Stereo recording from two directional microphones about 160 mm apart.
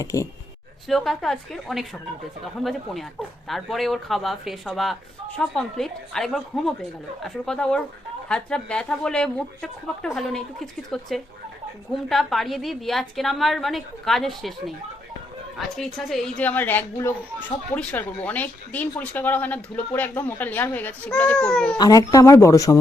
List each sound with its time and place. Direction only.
0.0 s speech: 20° left (ahead or behind)
0.9 s speech: centre (ahead or behind)
15.5 s speech: centre (ahead or behind)
21.8 s speech: 25° left (ahead or behind)